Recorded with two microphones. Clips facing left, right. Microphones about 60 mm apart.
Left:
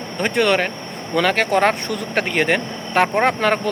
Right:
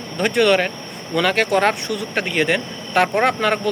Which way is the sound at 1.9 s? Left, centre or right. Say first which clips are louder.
Left 1 dB; left.